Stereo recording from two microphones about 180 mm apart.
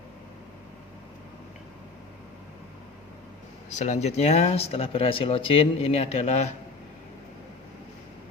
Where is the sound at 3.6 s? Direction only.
40° left (ahead or behind).